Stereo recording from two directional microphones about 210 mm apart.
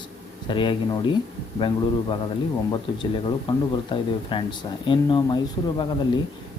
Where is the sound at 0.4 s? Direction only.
25° left (ahead or behind).